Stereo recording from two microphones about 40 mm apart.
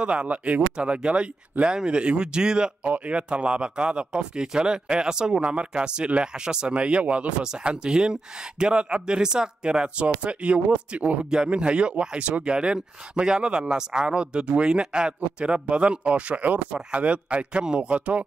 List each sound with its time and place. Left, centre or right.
0.0 s a man's voice: right
2.8 s a man's voice: right
3.2 s speech: right
6.7 s speech: right
12.4 s a man's voice: right